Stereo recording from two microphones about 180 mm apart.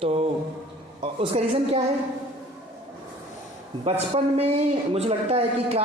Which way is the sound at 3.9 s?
35° right (ahead or behind).